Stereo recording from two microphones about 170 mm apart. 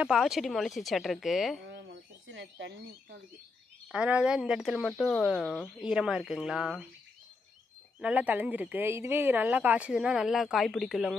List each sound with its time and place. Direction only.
0.0 s speech: centre (ahead or behind)
1.7 s bird: 90° right
3.9 s speech: 5° right (ahead or behind)
8.0 s a woman's voice: 10° right (ahead or behind)